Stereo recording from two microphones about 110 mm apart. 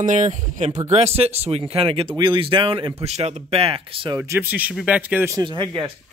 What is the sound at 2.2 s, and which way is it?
Speech, 45° right (ahead or behind).